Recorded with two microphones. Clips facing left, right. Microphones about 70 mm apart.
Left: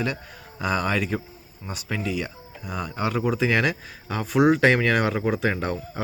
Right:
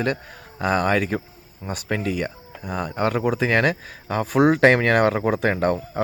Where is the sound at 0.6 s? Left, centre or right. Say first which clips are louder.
Right 4 dB; right.